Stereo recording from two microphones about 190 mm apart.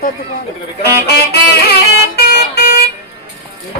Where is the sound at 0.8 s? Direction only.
60° left (ahead or behind).